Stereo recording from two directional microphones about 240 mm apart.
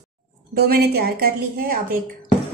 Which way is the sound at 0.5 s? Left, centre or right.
Right.